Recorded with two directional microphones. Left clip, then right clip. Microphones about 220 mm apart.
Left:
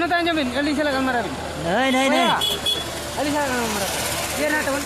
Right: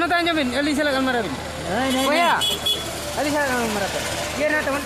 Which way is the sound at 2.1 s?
40° right (ahead or behind).